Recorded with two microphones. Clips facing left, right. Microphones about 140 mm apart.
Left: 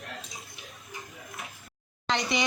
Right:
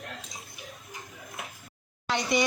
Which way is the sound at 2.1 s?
10° right (ahead or behind).